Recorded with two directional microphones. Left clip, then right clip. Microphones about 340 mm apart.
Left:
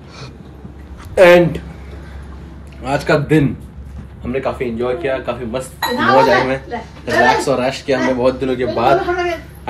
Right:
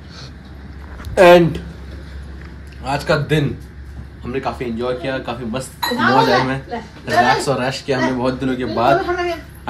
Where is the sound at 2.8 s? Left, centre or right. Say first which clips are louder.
Left 3 dB; centre.